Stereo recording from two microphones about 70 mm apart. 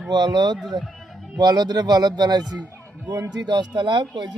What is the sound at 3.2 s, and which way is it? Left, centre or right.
Speech, right.